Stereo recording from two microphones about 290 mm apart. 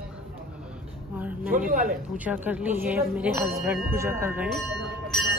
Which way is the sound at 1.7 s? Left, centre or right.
Right.